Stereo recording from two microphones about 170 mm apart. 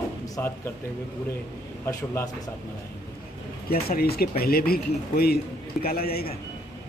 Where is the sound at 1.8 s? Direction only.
15° left (ahead or behind).